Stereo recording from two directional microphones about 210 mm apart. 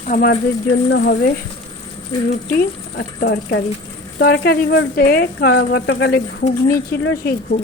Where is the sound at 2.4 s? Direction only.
45° left (ahead or behind).